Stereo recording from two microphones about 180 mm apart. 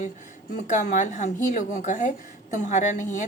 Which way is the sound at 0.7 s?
45° left (ahead or behind).